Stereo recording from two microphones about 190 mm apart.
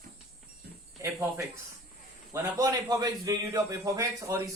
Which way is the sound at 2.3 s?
15° right (ahead or behind).